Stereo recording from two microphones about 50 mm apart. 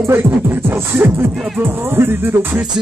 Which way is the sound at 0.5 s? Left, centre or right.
Right.